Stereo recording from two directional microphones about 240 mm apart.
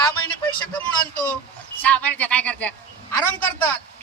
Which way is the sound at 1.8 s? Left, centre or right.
Centre.